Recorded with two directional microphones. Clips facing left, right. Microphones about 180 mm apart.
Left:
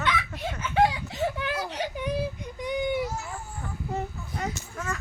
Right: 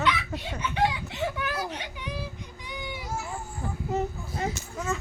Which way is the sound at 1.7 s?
40° left (ahead or behind).